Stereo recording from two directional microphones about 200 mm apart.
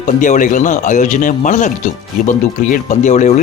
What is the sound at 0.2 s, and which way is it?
Speech, 40° left (ahead or behind).